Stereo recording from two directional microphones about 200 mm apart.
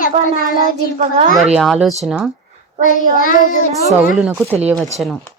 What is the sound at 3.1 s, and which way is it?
Speech, 45° left (ahead or behind).